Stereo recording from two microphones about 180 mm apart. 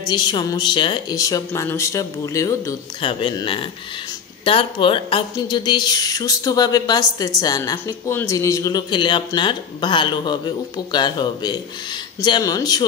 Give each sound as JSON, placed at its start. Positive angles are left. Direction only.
{"t": 0.0, "sound": "a woman's voice", "side_deg": 25}
{"t": 3.0, "sound": "a woman's voice", "side_deg": 30}